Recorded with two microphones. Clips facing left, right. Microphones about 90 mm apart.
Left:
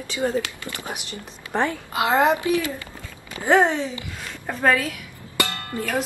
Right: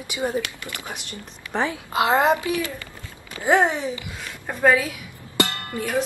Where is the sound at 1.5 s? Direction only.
Centre (ahead or behind).